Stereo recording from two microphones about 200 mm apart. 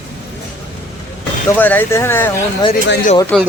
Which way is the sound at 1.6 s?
10° left (ahead or behind).